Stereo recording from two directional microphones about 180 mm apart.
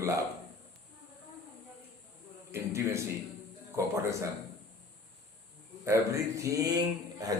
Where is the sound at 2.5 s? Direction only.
15° right (ahead or behind).